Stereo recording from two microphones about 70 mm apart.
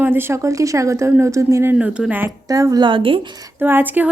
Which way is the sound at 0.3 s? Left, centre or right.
Right.